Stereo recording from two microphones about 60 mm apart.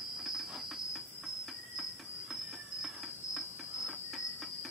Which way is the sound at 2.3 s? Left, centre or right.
Centre.